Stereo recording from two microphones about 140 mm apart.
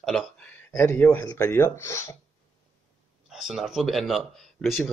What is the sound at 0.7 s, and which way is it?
Speech, 15° left (ahead or behind).